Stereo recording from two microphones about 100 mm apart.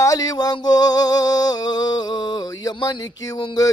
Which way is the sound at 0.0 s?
35° left (ahead or behind).